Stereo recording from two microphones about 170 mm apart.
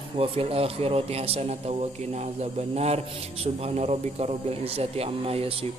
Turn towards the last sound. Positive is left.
turn(degrees=-35)  # may be behind; listen again after turning